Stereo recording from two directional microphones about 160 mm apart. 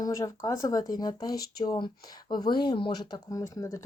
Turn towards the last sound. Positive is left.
turn(degrees=20)  # may be behind; listen again after turning